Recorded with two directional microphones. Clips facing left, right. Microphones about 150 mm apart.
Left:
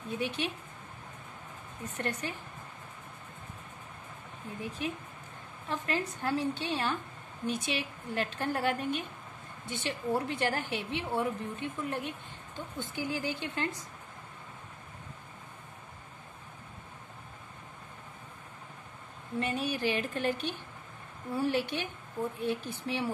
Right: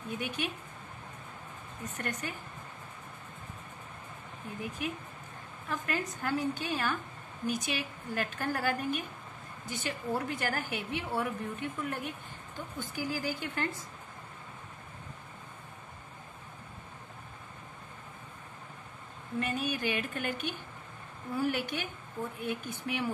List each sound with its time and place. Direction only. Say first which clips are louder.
0.2 s a woman's voice: left 3 dB; 30° left (ahead or behind)
2.0 s a woman's voice: left 3 dB; 30° left (ahead or behind)
4.8 s a woman's voice: left 1 dB; 30° left (ahead or behind)
19.4 s a woman's voice: left 2 dB; 30° left (ahead or behind)